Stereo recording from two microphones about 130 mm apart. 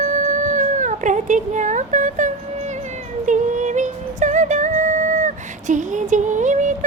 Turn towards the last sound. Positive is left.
turn(degrees=-70)  # may be behind; listen again after turning